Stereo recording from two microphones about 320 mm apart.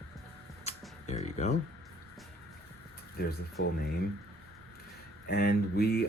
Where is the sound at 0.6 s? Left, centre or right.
Left.